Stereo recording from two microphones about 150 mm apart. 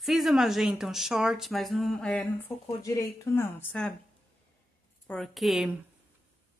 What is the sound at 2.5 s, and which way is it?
Speech, 15° left (ahead or behind).